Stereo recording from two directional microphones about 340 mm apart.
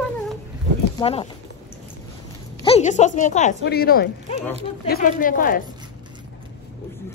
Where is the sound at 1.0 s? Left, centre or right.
Centre.